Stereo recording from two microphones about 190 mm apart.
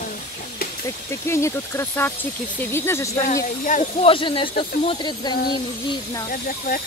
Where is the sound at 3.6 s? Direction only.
40° left (ahead or behind).